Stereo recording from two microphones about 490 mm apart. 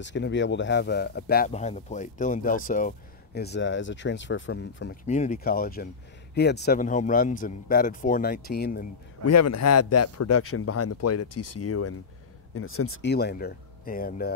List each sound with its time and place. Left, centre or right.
0.0 s speech: left
9.2 s speech: left